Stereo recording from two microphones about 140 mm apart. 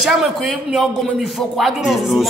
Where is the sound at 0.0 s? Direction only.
Centre (ahead or behind).